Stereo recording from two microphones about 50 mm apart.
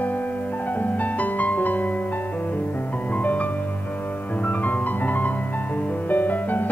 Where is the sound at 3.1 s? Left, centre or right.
Left.